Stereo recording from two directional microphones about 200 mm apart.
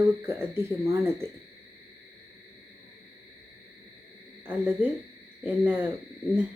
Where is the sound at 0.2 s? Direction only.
10° right (ahead or behind).